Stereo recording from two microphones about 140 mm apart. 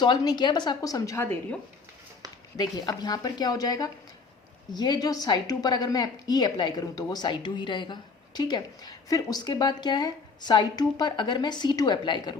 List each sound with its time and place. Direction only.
0.0 s a woman's voice: 30° left (ahead or behind)
2.2 s a sound: 25° right (ahead or behind)
2.6 s a woman's voice: 30° left (ahead or behind)